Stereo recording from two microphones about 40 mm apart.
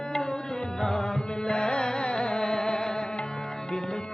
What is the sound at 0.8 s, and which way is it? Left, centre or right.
Music, centre.